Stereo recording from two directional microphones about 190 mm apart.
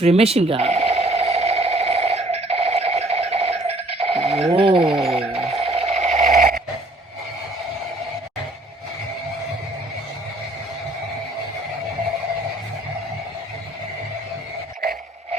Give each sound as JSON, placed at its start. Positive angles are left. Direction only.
{"t": 0.0, "sound": "sewing machine", "side_deg": -30}
{"t": 4.4, "sound": "speech", "side_deg": -25}
{"t": 5.2, "sound": "a sound", "side_deg": -30}